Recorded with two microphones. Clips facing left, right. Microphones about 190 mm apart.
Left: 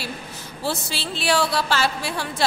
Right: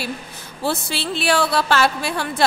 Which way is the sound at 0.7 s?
60° right (ahead or behind).